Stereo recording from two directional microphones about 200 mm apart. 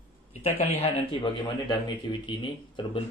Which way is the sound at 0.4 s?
35° left (ahead or behind).